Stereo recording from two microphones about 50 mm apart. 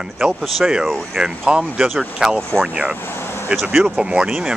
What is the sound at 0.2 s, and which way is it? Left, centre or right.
Speech, centre.